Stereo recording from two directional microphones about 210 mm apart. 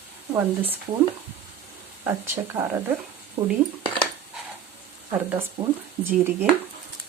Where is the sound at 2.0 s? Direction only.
10° right (ahead or behind).